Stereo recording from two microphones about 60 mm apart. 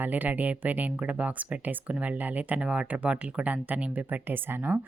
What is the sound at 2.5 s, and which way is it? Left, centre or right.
Speech, centre.